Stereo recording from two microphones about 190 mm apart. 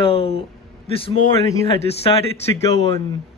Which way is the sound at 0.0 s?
30° left (ahead or behind).